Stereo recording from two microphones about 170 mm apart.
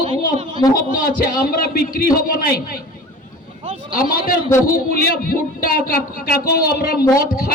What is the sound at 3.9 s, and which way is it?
A man's voice, 60° left (ahead or behind).